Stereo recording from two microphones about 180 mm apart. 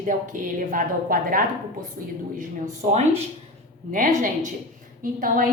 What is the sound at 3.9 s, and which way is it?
A woman's voice, 45° right (ahead or behind).